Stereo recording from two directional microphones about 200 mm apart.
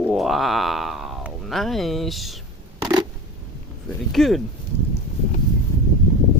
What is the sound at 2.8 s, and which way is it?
Scissors, 20° right (ahead or behind).